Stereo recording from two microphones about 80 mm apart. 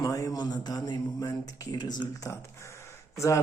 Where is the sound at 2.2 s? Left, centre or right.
Left.